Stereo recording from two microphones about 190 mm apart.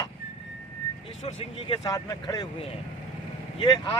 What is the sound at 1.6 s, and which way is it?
Speech, 25° left (ahead or behind).